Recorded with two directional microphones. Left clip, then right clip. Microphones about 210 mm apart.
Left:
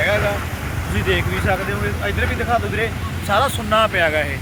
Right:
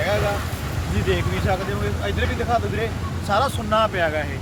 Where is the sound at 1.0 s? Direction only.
5° left (ahead or behind); by 4.3 s 25° left (ahead or behind).